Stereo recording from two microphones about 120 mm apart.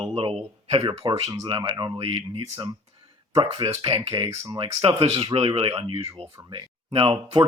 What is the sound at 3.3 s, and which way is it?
Speech, 45° right (ahead or behind).